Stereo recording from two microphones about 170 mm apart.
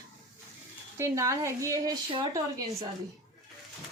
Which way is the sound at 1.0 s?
15° right (ahead or behind).